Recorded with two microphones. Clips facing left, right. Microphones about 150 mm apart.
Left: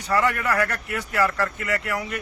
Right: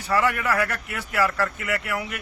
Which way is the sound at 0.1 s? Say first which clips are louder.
Even; 5° right (ahead or behind).